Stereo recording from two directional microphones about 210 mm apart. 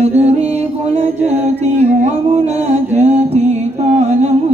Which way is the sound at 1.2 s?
10° right (ahead or behind).